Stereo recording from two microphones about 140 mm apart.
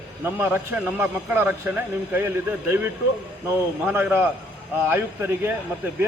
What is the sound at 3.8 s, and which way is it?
A man's voice, 15° right (ahead or behind).